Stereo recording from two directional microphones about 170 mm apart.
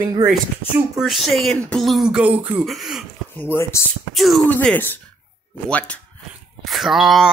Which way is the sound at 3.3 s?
15° left (ahead or behind).